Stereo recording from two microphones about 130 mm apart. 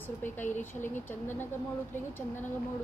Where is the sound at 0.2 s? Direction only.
15° left (ahead or behind).